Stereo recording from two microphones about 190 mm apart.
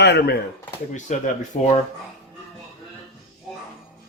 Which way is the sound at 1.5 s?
40° left (ahead or behind).